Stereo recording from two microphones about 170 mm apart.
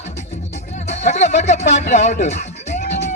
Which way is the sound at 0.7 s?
40° left (ahead or behind).